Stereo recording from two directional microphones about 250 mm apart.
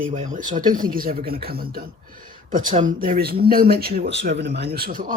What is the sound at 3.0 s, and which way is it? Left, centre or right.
Speech, right.